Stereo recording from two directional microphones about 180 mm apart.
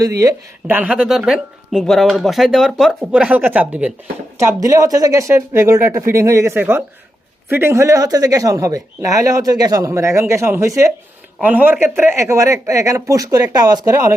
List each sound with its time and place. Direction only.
0.0 s speech: 20° right (ahead or behind)
0.8 s speech: 5° right (ahead or behind)